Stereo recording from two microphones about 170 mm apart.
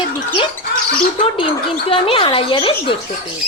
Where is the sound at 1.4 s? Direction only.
30° left (ahead or behind).